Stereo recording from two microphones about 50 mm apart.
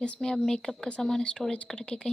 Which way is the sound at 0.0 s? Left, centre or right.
Centre.